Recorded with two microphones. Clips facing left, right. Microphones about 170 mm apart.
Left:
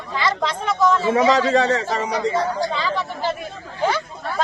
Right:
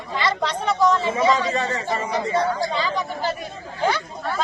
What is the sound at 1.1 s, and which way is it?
Speech, 80° left.